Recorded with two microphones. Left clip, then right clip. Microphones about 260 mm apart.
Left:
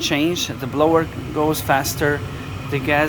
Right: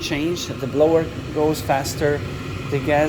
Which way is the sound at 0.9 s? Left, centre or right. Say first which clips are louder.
Left 1 dB; left.